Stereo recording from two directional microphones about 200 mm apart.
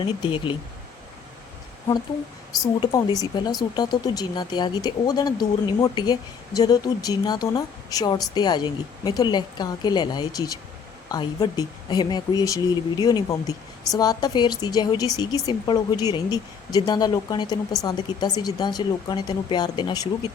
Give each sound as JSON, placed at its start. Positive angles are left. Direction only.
{"t": 0.0, "sound": "speech", "side_deg": 25}
{"t": 2.8, "sound": "speech", "side_deg": 20}